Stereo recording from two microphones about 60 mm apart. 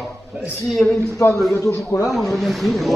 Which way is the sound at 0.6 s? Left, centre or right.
Centre.